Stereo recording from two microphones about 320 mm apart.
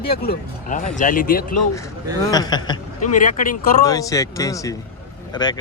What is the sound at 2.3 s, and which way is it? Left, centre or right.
Speech, centre.